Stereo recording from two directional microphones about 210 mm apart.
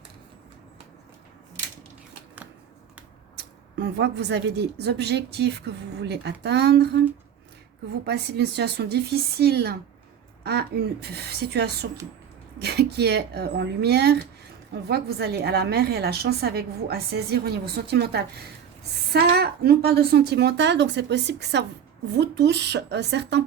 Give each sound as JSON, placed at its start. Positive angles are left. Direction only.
{"t": 3.3, "sound": "a woman's voice", "side_deg": -55}
{"t": 8.0, "sound": "a woman's voice", "side_deg": -50}